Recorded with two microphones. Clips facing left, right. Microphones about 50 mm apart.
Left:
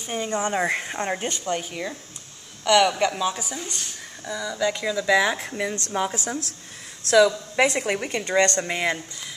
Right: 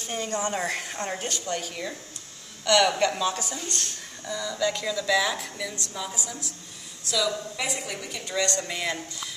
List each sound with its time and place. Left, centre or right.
0.0 s a woman's voice: centre; by 8.6 s left
8.6 s speech: left